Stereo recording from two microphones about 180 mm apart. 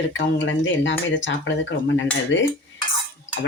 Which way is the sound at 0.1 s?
90° left.